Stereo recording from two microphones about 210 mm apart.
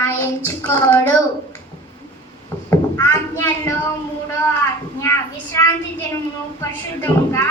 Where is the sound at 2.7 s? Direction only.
15° left (ahead or behind).